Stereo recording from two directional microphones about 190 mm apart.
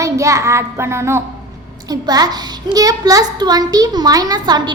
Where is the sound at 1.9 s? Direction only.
20° right (ahead or behind).